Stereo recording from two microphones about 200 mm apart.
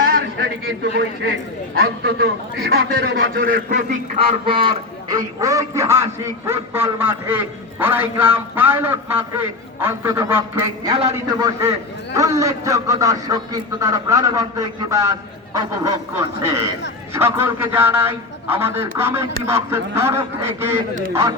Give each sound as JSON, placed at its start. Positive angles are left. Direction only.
{"t": 1.7, "sound": "a man's voice", "side_deg": -55}
{"t": 4.4, "sound": "a man's voice", "side_deg": -25}
{"t": 10.9, "sound": "a man's voice", "side_deg": -25}
{"t": 12.1, "sound": "a man's voice", "side_deg": -15}